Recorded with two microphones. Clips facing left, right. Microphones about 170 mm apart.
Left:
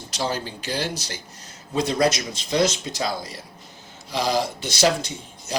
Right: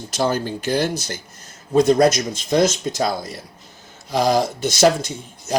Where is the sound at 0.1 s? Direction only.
50° right (ahead or behind).